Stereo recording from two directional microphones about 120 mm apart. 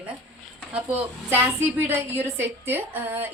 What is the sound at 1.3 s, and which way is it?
A woman's voice, 20° right (ahead or behind).